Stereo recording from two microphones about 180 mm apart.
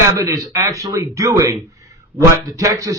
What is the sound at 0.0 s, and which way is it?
Speech, 20° right (ahead or behind).